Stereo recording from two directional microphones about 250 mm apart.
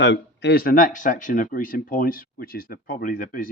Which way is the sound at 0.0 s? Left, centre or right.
Left.